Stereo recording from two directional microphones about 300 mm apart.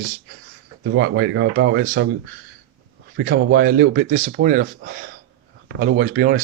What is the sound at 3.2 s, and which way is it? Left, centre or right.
Speech, right.